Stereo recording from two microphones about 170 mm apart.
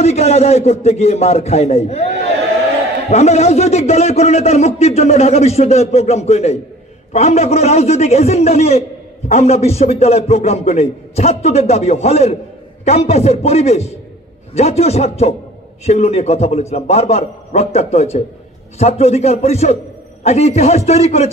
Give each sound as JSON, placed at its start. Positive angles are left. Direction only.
{"t": 0.0, "sound": "a man's voice", "side_deg": 40}
{"t": 3.1, "sound": "a man's voice", "side_deg": 40}